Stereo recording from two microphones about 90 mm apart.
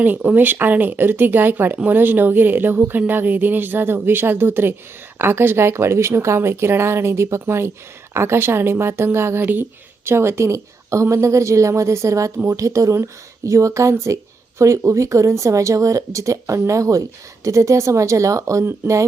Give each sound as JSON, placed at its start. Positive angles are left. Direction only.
{"t": 0.0, "sound": "speech", "side_deg": -15}